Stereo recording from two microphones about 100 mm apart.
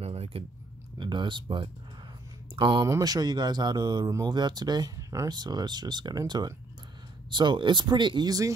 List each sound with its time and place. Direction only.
0.0 s a sound: 85° right
0.9 s speech: 50° right (ahead or behind)
2.8 s speech: 35° right (ahead or behind)